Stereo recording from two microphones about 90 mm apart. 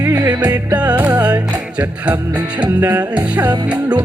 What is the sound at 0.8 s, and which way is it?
Music, 15° right (ahead or behind).